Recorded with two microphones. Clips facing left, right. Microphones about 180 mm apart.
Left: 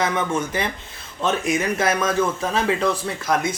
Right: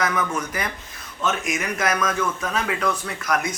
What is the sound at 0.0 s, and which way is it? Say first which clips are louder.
Speech: left 2 dB; 25° left (ahead or behind).